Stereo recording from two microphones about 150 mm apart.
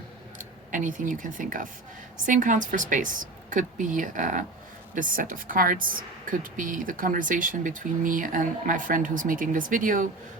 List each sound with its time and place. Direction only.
0.7 s speech: 60° right (ahead or behind)